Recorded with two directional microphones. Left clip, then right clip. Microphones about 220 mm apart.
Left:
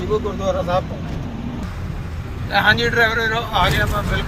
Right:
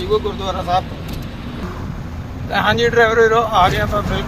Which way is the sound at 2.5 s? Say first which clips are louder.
Right 1 dB; 10° right (ahead or behind).